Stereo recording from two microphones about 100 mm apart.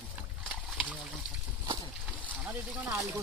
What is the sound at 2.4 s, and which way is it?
Speech, 15° right (ahead or behind).